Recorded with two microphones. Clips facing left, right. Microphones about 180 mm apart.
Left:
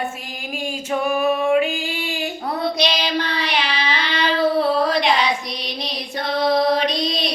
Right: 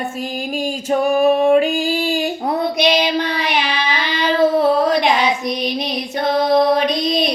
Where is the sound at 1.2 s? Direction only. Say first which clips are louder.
Right 5 dB; 35° right (ahead or behind).